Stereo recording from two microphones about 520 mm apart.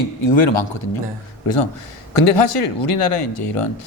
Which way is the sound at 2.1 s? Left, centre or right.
Left.